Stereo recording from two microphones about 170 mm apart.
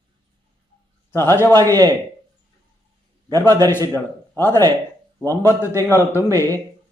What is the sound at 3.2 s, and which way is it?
A man's voice, 15° left (ahead or behind).